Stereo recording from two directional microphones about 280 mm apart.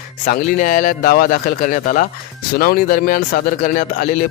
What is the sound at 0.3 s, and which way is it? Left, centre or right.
Speech, left.